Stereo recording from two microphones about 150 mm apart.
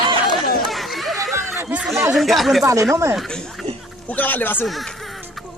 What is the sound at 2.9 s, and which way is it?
Speech, 20° right (ahead or behind).